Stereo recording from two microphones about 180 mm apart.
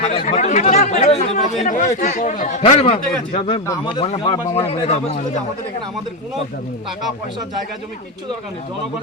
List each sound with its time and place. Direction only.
0.1 s a man's voice: 35° left (ahead or behind)